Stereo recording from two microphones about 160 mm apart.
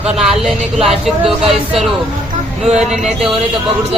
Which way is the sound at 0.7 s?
40° right (ahead or behind).